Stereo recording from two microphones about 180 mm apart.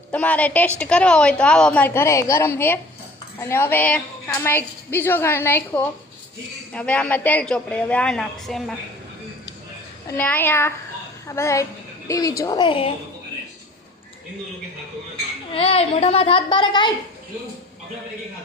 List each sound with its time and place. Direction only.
0.1 s a woman's voice: 10° left (ahead or behind)
10.1 s a woman's voice: 10° left (ahead or behind); by 12.9 s 30° left (ahead or behind)
15.5 s a child's voice: 30° left (ahead or behind)